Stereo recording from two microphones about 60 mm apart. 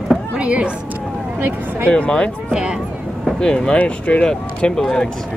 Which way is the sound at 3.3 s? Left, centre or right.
Centre.